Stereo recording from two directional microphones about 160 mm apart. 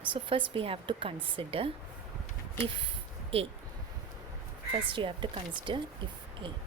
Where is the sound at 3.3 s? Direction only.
35° right (ahead or behind).